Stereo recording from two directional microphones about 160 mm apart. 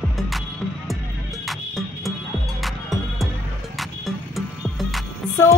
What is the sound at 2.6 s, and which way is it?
Music, centre (ahead or behind).